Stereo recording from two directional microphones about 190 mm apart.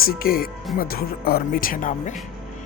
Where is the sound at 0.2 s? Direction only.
50° left (ahead or behind).